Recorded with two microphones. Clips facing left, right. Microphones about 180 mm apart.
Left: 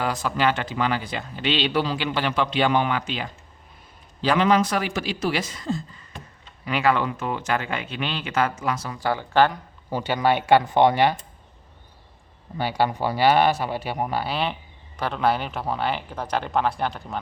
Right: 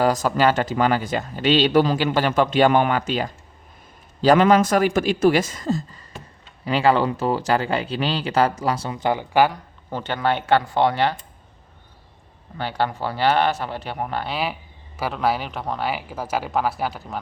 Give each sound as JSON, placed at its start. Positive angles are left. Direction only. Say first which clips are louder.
{"t": 0.0, "sound": "speech", "louder": "right 5 dB", "side_deg": -40}
{"t": 9.5, "sound": "speech", "louder": "left 1 dB", "side_deg": 10}
{"t": 12.5, "sound": "speech", "louder": "left 1 dB", "side_deg": 10}